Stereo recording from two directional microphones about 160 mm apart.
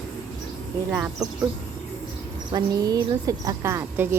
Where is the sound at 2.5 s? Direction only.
25° right (ahead or behind).